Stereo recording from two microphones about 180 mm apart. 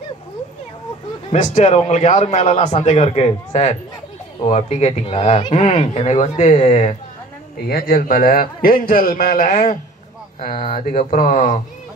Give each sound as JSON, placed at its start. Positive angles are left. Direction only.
{"t": 1.3, "sound": "speech", "side_deg": 40}
{"t": 7.6, "sound": "a man's voice", "side_deg": 55}